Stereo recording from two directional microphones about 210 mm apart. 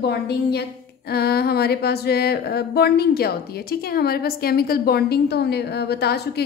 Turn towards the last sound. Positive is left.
turn(degrees=50)  # may be behind; listen again after turning